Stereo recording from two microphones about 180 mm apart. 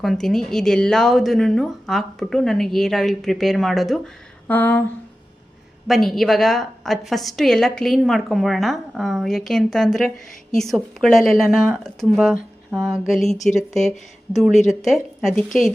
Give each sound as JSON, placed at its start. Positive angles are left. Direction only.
{"t": 0.0, "sound": "a woman's voice", "side_deg": 0}
{"t": 5.9, "sound": "a woman's voice", "side_deg": 0}
{"t": 15.4, "sound": "a woman's voice", "side_deg": 45}